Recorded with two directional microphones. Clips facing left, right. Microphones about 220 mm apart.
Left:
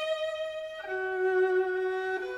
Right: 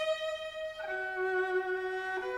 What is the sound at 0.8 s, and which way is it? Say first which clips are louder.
Violin: left 8 dB; 30° left (ahead or behind).